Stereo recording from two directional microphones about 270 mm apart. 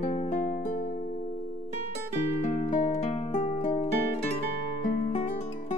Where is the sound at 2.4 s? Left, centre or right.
Left.